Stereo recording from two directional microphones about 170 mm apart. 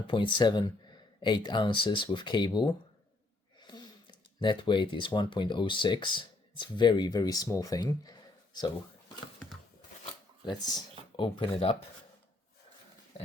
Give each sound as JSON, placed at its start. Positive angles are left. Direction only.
{"t": 0.1, "sound": "speech", "side_deg": 30}
{"t": 10.4, "sound": "speech", "side_deg": 25}